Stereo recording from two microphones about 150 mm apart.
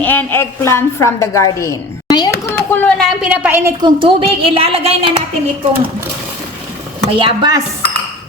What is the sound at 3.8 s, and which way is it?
A woman's voice, 35° right (ahead or behind).